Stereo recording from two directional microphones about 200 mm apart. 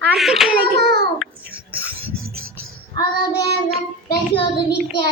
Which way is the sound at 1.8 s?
90° right.